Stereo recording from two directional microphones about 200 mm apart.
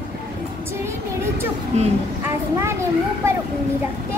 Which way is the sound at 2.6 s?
15° right (ahead or behind).